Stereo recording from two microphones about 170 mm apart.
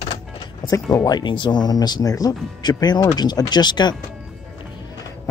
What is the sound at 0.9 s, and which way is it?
Speech, 25° left (ahead or behind).